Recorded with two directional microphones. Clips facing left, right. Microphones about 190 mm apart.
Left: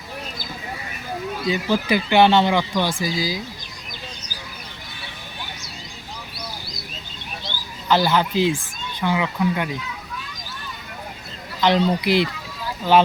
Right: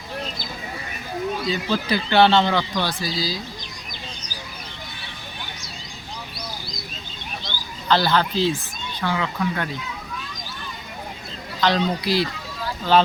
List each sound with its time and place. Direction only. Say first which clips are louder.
1.5 s speech: left 6 dB; 15° left (ahead or behind)
7.9 s speech: left 1 dB; 15° left (ahead or behind)
11.6 s a man's voice: left 3 dB; 20° left (ahead or behind)